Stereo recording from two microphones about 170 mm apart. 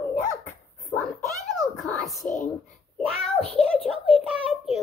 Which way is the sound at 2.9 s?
5° left (ahead or behind).